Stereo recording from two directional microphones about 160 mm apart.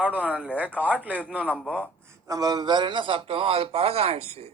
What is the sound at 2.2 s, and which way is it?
A man's voice, 25° right (ahead or behind).